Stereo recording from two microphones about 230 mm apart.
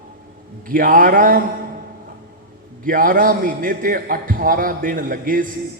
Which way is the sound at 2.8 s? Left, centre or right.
Right.